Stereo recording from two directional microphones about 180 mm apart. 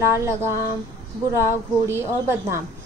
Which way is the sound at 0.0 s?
15° right (ahead or behind).